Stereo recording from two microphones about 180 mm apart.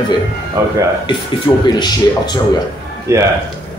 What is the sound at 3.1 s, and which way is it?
Speech, 15° right (ahead or behind).